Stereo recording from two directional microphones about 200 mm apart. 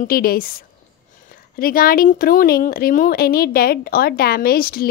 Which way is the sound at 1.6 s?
45° left (ahead or behind).